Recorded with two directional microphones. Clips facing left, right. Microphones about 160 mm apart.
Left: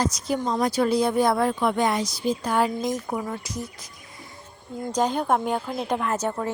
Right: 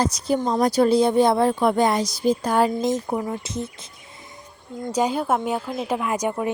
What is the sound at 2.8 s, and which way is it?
Speech, 25° right (ahead or behind).